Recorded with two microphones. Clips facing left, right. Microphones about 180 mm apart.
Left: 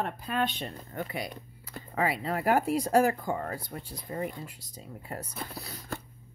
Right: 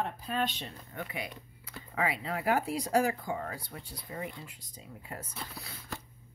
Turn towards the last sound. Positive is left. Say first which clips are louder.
# left 4 dB
turn(degrees=45)  # may be behind; listen again after turning